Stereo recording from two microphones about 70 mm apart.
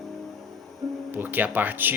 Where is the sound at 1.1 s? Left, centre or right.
Right.